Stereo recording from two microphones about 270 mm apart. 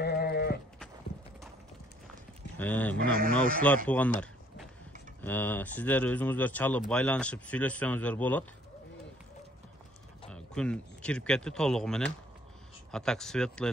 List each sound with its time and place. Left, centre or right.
0.0 s sheep: left
2.6 s speech: centre
3.0 s a man's voice: right
3.6 s speech: centre
5.2 s speech: centre
10.2 s speech: centre